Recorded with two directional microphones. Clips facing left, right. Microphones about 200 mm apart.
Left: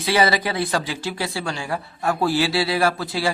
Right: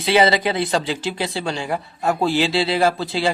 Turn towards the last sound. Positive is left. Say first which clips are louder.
# right 2 dB
turn(degrees=-25)  # may be behind; listen again after turning